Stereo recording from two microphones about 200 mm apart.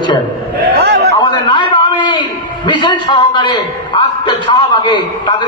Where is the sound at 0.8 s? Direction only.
55° right (ahead or behind).